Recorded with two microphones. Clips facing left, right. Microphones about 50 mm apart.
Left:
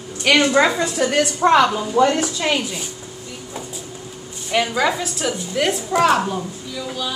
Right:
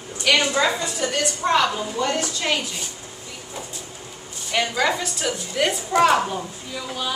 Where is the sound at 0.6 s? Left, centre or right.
Left.